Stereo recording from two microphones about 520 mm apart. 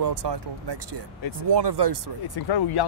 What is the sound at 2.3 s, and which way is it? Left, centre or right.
Speech, left.